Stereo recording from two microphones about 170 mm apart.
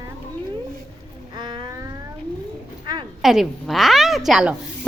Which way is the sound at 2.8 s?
25° right (ahead or behind).